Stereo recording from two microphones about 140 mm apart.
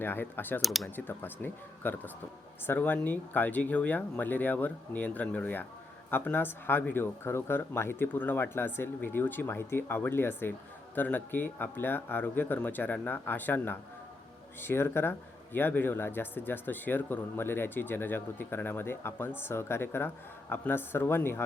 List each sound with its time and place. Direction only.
0.0 s speech: 15° left (ahead or behind)
0.6 s speech: centre (ahead or behind)
0.9 s speech: 15° left (ahead or behind)